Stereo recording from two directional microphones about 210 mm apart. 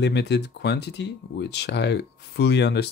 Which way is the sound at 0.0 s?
55° left (ahead or behind).